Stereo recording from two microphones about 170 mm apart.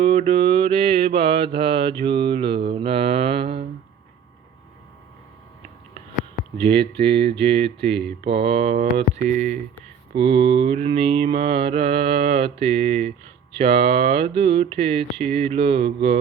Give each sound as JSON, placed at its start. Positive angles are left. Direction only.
{"t": 0.0, "sound": "mantra", "side_deg": -35}
{"t": 6.6, "sound": "mantra", "side_deg": -30}
{"t": 10.2, "sound": "mantra", "side_deg": -30}